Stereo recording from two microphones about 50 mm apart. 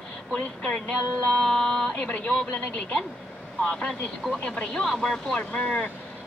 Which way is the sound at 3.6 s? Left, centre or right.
Centre.